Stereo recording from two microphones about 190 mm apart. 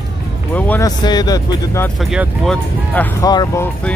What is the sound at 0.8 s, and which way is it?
Speech, 20° left (ahead or behind).